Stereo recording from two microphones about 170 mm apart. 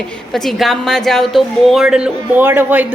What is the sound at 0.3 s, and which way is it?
A man's voice, centre (ahead or behind).